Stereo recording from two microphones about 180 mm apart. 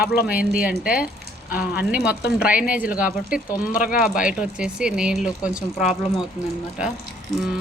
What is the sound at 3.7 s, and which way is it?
Speech, 50° left (ahead or behind).